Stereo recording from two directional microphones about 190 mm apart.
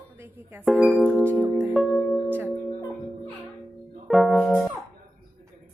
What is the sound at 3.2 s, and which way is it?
Music, centre (ahead or behind).